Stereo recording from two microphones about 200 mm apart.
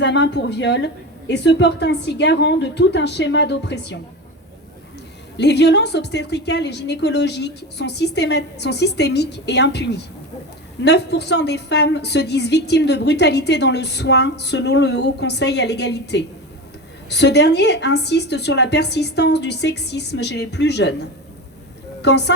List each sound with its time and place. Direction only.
0.0 s a woman's voice: 60° left (ahead or behind)
5.4 s a woman's voice: 60° left (ahead or behind)